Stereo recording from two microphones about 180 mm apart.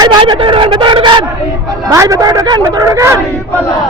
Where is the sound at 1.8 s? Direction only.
20° right (ahead or behind).